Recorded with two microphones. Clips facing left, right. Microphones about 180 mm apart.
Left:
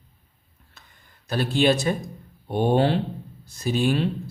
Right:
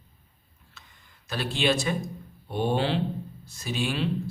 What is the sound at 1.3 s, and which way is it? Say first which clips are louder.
A man's voice: left 5 dB; 40° left (ahead or behind).